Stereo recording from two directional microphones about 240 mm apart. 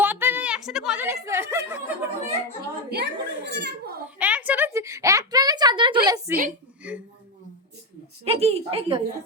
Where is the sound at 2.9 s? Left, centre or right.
Right.